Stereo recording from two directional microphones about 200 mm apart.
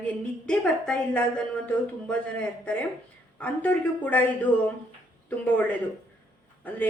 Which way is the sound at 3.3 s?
10° left (ahead or behind).